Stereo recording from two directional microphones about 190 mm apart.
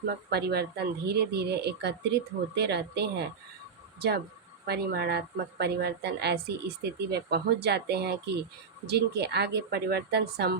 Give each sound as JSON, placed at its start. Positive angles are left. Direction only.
{"t": 0.0, "sound": "a woman's voice", "side_deg": -60}
{"t": 4.6, "sound": "a woman's voice", "side_deg": -55}